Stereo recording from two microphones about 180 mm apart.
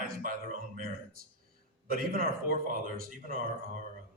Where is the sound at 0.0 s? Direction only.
50° right (ahead or behind).